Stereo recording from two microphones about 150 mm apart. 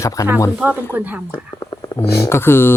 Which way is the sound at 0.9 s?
10° right (ahead or behind).